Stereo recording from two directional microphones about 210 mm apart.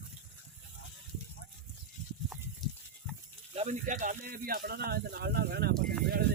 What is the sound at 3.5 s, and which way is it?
Speech, 35° right (ahead or behind).